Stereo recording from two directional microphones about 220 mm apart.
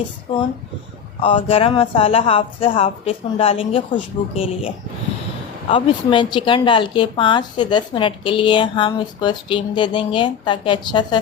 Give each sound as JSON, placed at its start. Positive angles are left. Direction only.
{"t": 1.2, "sound": "a woman's voice", "side_deg": 25}
{"t": 5.7, "sound": "a woman's voice", "side_deg": 20}